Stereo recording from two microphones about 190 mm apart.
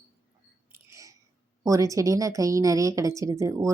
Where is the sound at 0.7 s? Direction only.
15° right (ahead or behind).